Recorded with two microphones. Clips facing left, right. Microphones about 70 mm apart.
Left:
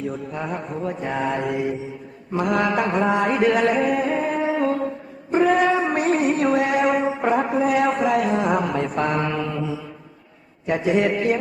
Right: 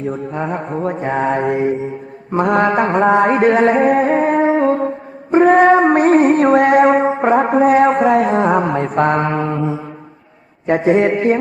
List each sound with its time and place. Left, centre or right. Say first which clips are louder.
0.0 s mantra: right 6 dB; right
5.3 s music: right 8 dB; right
10.7 s mantra: right 7 dB; right